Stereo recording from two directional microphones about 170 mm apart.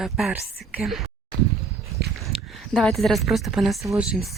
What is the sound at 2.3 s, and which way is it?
Speech, centre (ahead or behind).